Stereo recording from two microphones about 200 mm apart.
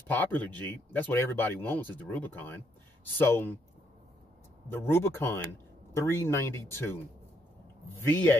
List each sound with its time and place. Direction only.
0.1 s speech: 10° left (ahead or behind)
4.6 s speech: 10° left (ahead or behind)
8.0 s speech: 10° left (ahead or behind)